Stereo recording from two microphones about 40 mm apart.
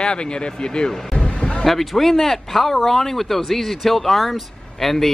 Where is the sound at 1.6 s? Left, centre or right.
Centre.